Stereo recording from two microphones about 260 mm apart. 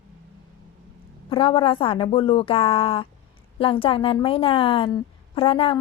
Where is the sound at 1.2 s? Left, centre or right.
Centre.